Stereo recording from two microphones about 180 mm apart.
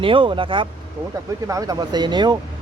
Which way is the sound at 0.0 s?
30° right (ahead or behind).